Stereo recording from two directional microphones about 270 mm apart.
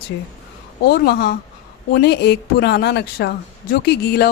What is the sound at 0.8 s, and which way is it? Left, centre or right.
Speech, left.